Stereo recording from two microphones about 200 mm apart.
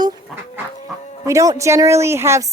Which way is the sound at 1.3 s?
15° right (ahead or behind).